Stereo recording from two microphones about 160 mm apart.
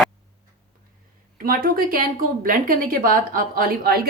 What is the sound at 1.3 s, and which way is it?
A woman's voice, 65° right (ahead or behind).